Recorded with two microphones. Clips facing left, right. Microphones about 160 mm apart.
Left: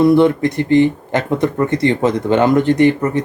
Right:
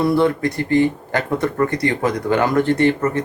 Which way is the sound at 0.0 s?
20° left (ahead or behind).